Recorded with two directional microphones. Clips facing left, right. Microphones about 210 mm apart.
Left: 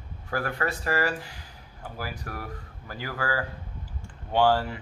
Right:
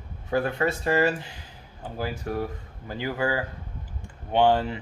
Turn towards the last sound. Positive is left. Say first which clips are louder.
# right 2 dB
turn(degrees=-20)  # may be behind; listen again after turning